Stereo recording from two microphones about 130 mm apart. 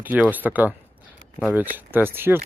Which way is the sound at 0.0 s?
10° right (ahead or behind).